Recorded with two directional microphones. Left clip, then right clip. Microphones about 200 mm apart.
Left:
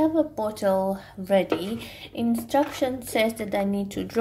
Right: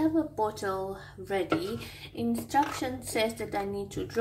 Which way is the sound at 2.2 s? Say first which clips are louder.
Left 4 dB; 40° left (ahead or behind).